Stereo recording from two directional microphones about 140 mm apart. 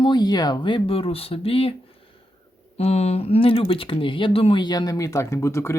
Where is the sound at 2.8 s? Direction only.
50° left (ahead or behind).